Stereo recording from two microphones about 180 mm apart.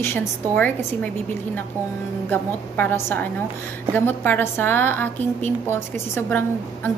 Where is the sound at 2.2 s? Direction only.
10° left (ahead or behind).